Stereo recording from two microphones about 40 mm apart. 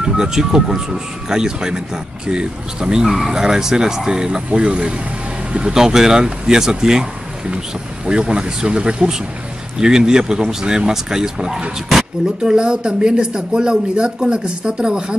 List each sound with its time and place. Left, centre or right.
0.0 s speech: centre
8.1 s speech: right